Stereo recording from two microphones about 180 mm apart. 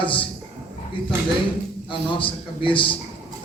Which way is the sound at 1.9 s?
30° left (ahead or behind).